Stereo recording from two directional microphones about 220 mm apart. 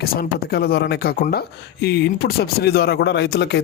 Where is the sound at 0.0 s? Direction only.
45° left (ahead or behind).